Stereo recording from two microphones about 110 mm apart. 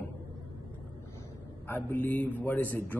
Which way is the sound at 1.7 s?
15° left (ahead or behind).